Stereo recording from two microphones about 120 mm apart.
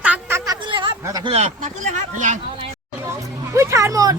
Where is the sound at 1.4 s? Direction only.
80° right.